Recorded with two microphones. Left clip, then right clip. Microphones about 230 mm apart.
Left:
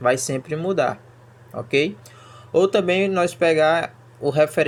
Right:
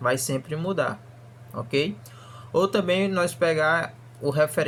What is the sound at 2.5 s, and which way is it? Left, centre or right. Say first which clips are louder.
Speech: left 5 dB; centre.